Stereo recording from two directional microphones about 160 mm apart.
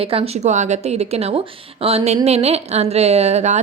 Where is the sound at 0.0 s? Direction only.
35° right (ahead or behind).